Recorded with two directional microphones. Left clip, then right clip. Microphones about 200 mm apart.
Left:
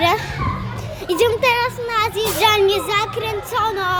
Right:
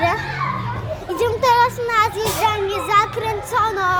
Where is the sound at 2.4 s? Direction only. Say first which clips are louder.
Left 5 dB; 60° left (ahead or behind).